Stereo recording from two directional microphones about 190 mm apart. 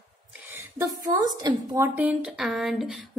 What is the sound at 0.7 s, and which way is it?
A woman's voice, 20° right (ahead or behind).